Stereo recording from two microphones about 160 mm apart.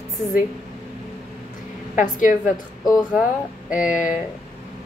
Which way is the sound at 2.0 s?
55° left (ahead or behind).